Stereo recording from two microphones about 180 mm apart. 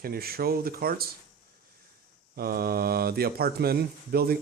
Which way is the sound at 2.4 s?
55° right (ahead or behind).